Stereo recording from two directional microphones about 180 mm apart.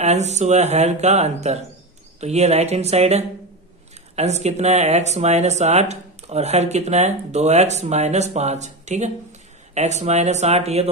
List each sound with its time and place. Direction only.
0.0 s speech: 40° right (ahead or behind)